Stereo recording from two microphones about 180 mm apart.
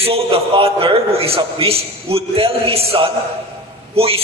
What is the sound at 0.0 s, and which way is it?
A man's voice, 30° right (ahead or behind).